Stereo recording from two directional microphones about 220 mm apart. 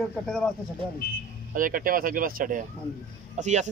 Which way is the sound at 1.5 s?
40° right (ahead or behind).